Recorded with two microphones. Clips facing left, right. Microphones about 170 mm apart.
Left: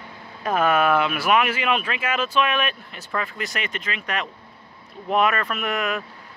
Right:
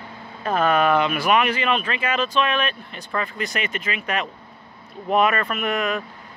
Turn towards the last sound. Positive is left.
turn(degrees=0)  # may be behind; listen again after turning